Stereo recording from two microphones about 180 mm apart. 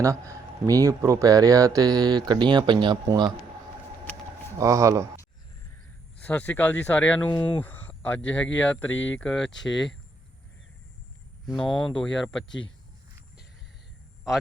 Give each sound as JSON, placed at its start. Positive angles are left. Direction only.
{"t": 0.0, "sound": "speech", "side_deg": -15}
{"t": 4.5, "sound": "speech", "side_deg": -15}
{"t": 6.2, "sound": "speech", "side_deg": 10}
{"t": 8.9, "sound": "speech", "side_deg": 90}
{"t": 9.1, "sound": "speech", "side_deg": 5}
{"t": 9.5, "sound": "speech", "side_deg": 90}
{"t": 11.4, "sound": "speech", "side_deg": 5}
{"t": 12.5, "sound": "speech", "side_deg": 90}